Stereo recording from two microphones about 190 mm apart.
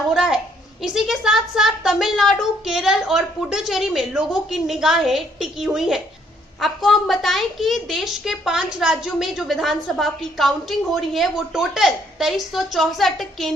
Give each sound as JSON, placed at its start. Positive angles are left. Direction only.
{"t": 0.1, "sound": "a woman's voice", "side_deg": -5}